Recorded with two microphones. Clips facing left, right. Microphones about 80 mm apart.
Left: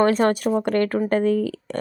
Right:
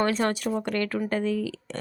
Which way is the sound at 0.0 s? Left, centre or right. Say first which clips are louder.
Left 7 dB; left.